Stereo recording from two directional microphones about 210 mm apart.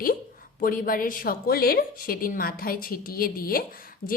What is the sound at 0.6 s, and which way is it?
A woman's voice, 40° left (ahead or behind).